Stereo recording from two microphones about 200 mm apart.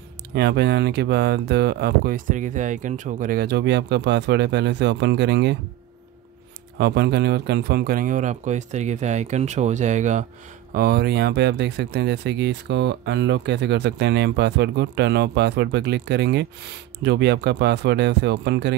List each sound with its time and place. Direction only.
0.3 s speech: 55° right (ahead or behind)
6.8 s a man's voice: 55° right (ahead or behind); by 10.2 s 35° right (ahead or behind)
10.7 s speech: 50° right (ahead or behind)